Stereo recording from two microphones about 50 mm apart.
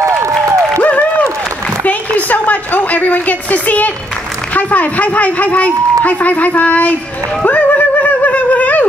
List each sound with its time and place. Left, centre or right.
0.7 s applause: left
1.9 s a woman's voice: left
7.4 s a sound: left